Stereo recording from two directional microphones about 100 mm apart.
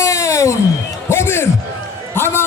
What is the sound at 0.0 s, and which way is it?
Music, 30° left (ahead or behind).